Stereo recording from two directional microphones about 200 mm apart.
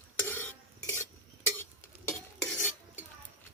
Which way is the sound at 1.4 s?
10° left (ahead or behind).